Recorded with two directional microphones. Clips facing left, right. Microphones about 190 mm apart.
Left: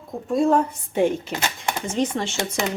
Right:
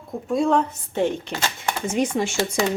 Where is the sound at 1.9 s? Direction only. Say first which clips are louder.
Right 2 dB; 10° right (ahead or behind).